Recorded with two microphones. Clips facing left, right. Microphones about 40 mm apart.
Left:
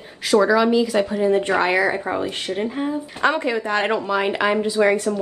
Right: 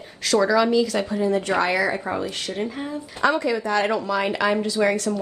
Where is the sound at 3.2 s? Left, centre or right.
Left.